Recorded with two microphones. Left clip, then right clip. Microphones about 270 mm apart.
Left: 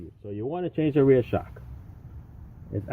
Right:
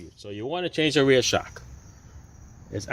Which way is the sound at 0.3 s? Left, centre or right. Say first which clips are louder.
Right 2 dB; centre.